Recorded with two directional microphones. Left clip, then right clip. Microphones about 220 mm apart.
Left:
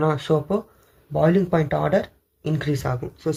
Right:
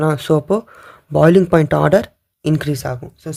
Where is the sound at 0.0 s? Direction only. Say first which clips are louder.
Right 5 dB; 45° right (ahead or behind).